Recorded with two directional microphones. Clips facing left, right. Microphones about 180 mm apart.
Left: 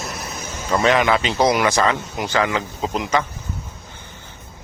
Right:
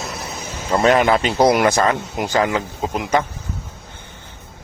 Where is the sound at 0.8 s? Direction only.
40° right (ahead or behind).